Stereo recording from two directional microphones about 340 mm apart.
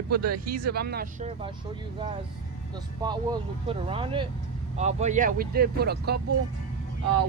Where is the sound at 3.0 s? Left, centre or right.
Centre.